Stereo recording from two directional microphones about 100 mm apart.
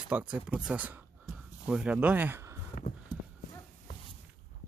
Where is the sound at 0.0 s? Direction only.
10° right (ahead or behind).